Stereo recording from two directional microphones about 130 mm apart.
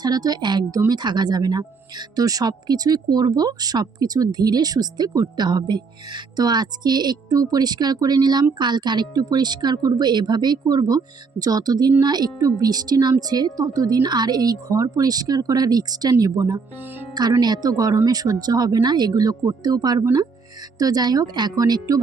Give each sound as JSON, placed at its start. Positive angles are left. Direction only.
{"t": 0.0, "sound": "speech", "side_deg": -30}